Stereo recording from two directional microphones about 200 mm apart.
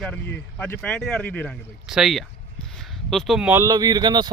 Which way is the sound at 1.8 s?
5° right (ahead or behind).